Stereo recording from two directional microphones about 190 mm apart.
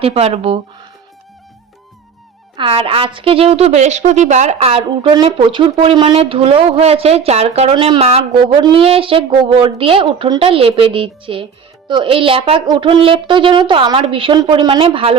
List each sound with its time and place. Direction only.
0.0 s speech: 35° right (ahead or behind)
2.6 s a woman's voice: 30° right (ahead or behind)